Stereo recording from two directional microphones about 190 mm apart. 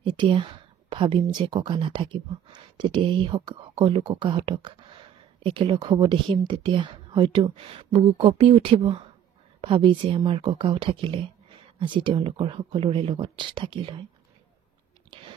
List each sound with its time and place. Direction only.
0.0 s speech: 25° right (ahead or behind)
15.1 s chewing: 25° right (ahead or behind)